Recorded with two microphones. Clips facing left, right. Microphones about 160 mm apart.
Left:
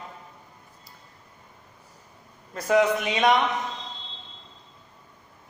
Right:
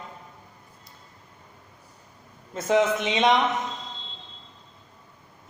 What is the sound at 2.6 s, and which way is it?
Speech, 20° right (ahead or behind).